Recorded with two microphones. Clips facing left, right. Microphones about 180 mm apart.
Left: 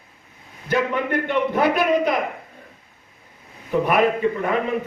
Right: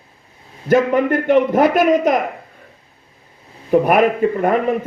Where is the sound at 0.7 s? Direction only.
45° right (ahead or behind).